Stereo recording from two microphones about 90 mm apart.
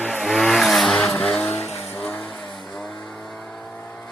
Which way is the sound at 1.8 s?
20° left (ahead or behind).